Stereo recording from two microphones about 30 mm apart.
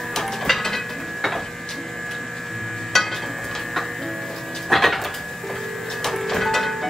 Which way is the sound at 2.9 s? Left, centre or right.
Centre.